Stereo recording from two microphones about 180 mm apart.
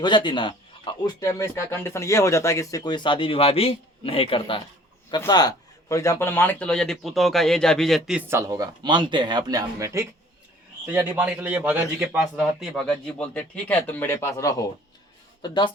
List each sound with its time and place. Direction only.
0.0 s a man's voice: 25° left (ahead or behind)